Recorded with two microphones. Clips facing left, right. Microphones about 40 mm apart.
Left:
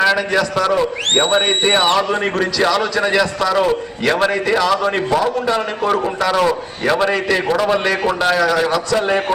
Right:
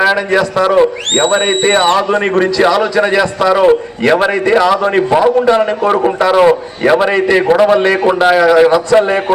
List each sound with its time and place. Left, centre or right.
0.3 s a man's voice: right
1.1 s speech: centre
2.2 s a man's voice: right
4.9 s a man's voice: right
6.5 s a man's voice: right
8.9 s a man's voice: right